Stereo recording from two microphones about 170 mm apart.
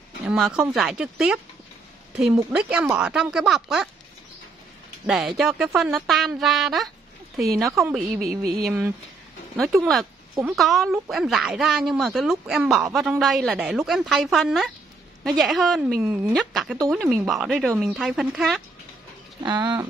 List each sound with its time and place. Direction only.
0.3 s speech: 5° right (ahead or behind)
5.0 s speech: centre (ahead or behind)
19.4 s speech: 25° right (ahead or behind)